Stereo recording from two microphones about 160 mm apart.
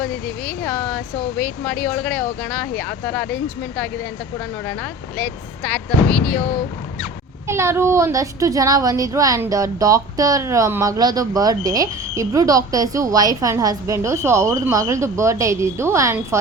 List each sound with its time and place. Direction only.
0.0 s speech: 10° left (ahead or behind)
4.6 s speech: 10° left (ahead or behind)
7.4 s speech: 15° right (ahead or behind)